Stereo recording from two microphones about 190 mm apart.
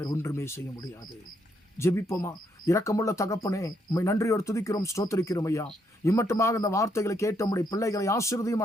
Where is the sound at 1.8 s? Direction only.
15° left (ahead or behind).